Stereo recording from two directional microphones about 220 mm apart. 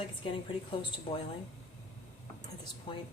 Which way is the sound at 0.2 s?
20° left (ahead or behind).